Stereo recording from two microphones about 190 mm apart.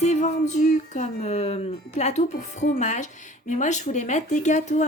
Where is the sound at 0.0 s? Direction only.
35° left (ahead or behind).